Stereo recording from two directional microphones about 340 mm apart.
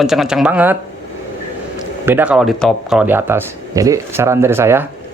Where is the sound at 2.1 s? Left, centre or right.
Centre.